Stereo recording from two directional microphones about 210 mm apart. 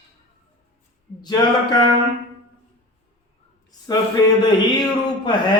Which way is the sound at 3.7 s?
20° left (ahead or behind).